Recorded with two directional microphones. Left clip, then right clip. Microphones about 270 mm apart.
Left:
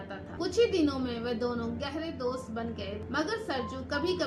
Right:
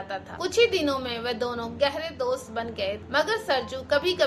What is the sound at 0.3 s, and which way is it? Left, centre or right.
A woman's voice, centre.